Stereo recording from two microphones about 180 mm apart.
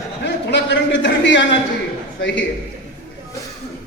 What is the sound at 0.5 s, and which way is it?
Speech, 80° left.